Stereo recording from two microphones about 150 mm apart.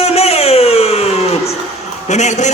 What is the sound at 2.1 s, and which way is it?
Speech, 50° left (ahead or behind).